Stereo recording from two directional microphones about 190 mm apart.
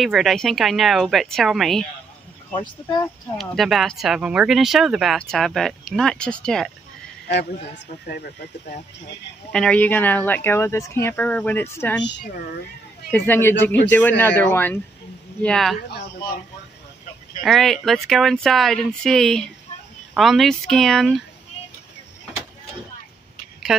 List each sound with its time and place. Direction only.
0.0 s speech: centre (ahead or behind)
3.3 s speech: centre (ahead or behind)
9.5 s speech: 5° left (ahead or behind)
12.2 s speech: 50° left (ahead or behind)
13.1 s speech: 10° left (ahead or behind)
17.4 s speech: centre (ahead or behind)